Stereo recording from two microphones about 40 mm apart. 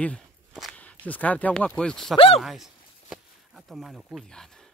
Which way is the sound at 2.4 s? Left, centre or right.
Centre.